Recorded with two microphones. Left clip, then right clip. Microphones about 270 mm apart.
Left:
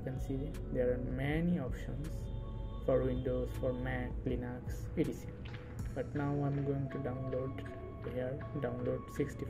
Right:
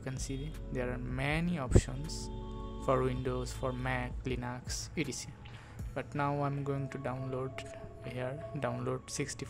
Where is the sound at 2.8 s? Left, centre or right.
Right.